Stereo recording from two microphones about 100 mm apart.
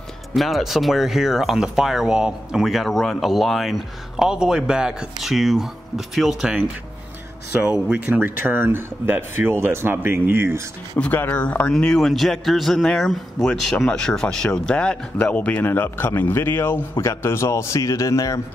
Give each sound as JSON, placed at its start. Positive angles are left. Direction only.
{"t": 0.3, "sound": "speech", "side_deg": 0}
{"t": 7.6, "sound": "speech", "side_deg": -15}
{"t": 11.0, "sound": "a man's voice", "side_deg": 15}